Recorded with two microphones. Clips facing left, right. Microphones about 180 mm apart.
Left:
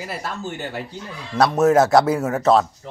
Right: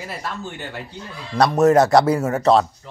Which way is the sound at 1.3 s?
Centre (ahead or behind).